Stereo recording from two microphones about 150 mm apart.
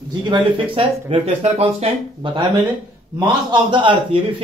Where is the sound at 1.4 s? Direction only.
40° right (ahead or behind).